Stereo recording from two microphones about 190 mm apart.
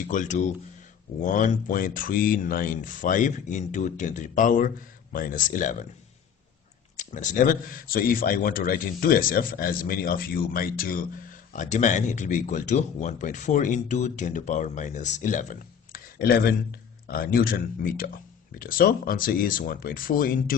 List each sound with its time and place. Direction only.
0.0 s a man's voice: 45° left (ahead or behind)
7.0 s a man's voice: 40° left (ahead or behind)